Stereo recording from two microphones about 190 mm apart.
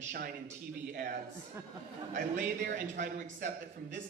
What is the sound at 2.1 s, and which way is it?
Speech, 40° right (ahead or behind).